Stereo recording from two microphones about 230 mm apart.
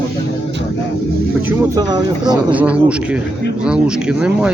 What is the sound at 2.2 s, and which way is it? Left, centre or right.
Speech, centre.